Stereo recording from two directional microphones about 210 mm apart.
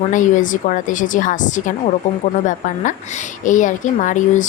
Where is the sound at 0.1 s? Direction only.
35° left (ahead or behind).